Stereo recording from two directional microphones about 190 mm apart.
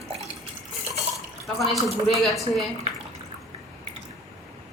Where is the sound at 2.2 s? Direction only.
Centre (ahead or behind).